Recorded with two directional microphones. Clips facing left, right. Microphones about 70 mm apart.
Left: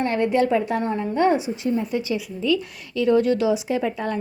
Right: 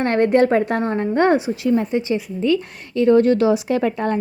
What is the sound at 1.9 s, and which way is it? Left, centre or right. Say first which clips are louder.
A woman's voice: right 4 dB; right.